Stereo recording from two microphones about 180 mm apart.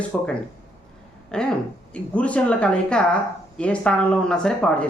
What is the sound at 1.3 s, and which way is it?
Speech, 5° left (ahead or behind).